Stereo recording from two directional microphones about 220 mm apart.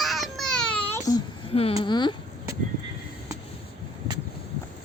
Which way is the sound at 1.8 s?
20° left (ahead or behind).